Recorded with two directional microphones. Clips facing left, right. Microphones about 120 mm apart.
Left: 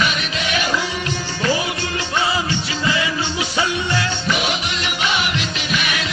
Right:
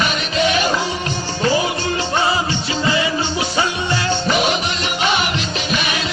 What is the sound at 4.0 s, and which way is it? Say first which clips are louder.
Music: right 3 dB; 30° right (ahead or behind).